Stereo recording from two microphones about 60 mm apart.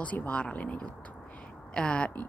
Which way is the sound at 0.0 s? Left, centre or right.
Left.